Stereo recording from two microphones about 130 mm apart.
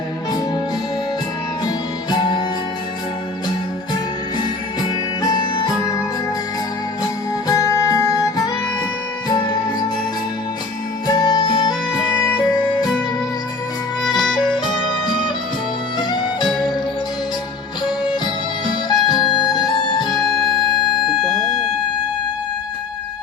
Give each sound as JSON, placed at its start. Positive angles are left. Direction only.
{"t": 1.6, "sound": "music", "side_deg": 35}
{"t": 4.4, "sound": "music", "side_deg": 30}
{"t": 7.0, "sound": "music", "side_deg": 30}
{"t": 11.0, "sound": "music", "side_deg": 35}
{"t": 14.1, "sound": "music", "side_deg": 35}
{"t": 18.6, "sound": "music", "side_deg": 35}
{"t": 21.1, "sound": "music", "side_deg": 0}